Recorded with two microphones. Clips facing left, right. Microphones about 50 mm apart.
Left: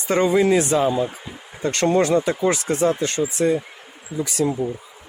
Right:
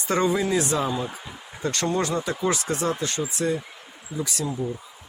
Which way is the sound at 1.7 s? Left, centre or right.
Left.